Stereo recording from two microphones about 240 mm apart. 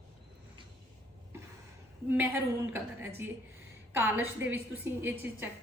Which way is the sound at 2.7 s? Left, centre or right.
Centre.